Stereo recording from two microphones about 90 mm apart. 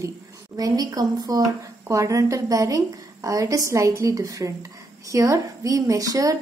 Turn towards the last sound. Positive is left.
turn(degrees=-40)  # may be behind; listen again after turning